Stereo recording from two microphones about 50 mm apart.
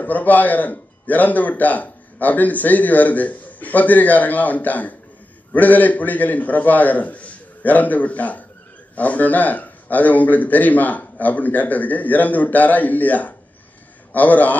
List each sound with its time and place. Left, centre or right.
0.0 s a man's voice: left